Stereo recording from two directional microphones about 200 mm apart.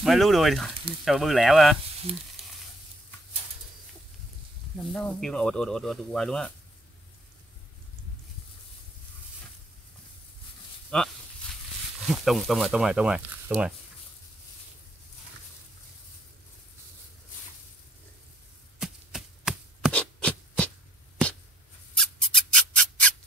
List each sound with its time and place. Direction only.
0.0 s speech: centre (ahead or behind)
2.4 s sizzle: 30° right (ahead or behind)
4.9 s speech: 5° left (ahead or behind)
10.9 s speech: 5° left (ahead or behind)
12.1 s speech: centre (ahead or behind)
18.8 s chopping: centre (ahead or behind)
21.9 s a sound: 5° left (ahead or behind)